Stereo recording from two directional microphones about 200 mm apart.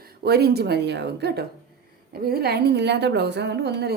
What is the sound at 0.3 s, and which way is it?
A woman's voice, 55° right (ahead or behind).